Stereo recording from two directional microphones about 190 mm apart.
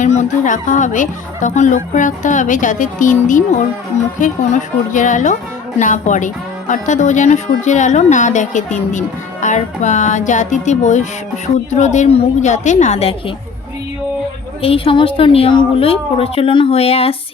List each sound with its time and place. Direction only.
0.0 s a woman's voice: 40° left (ahead or behind)
14.6 s a woman's voice: 30° left (ahead or behind)